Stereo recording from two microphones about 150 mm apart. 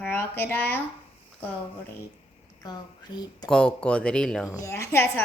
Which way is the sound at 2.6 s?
25° left (ahead or behind).